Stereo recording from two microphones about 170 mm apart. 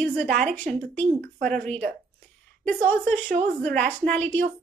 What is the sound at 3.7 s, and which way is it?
Speech, 50° right (ahead or behind).